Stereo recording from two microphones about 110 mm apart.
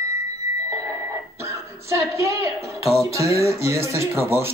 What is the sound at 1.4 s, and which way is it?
Cough, 25° right (ahead or behind).